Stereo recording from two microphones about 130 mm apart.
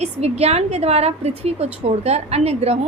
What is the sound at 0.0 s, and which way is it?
A woman's voice, 55° right (ahead or behind).